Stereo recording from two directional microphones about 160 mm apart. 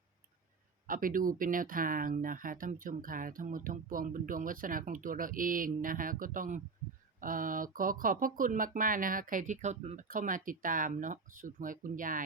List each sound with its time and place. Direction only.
0.9 s speech: 60° right (ahead or behind)